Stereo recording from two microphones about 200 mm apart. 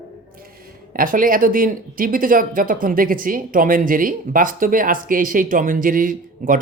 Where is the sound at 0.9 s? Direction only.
45° right (ahead or behind).